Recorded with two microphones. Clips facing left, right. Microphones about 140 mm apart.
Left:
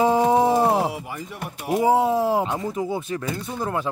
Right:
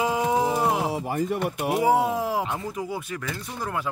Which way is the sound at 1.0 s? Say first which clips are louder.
Right 8 dB; 45° right (ahead or behind).